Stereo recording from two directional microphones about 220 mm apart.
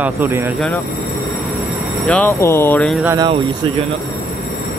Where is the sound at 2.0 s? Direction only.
5° left (ahead or behind).